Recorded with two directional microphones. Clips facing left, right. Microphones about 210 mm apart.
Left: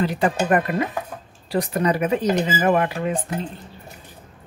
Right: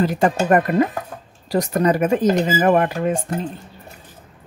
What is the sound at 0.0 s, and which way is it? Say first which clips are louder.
Speech: right 3 dB; 45° right (ahead or behind).